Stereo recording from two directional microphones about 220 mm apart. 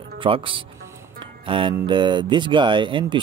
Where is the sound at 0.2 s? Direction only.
25° right (ahead or behind).